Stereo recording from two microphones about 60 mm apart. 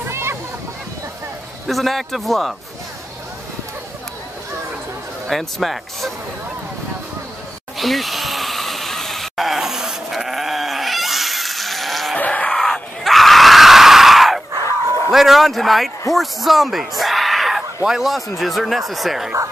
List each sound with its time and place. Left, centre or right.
0.1 s a sound: right
1.7 s speech: centre
5.3 s speech: centre
7.7 s vehicle: centre
12.2 s a sound: left
12.4 s screaming: centre
15.0 s speech: centre